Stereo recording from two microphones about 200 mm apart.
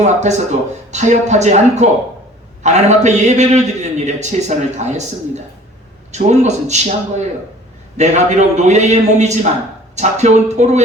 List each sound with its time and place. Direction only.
0.0 s a man's voice: 35° right (ahead or behind)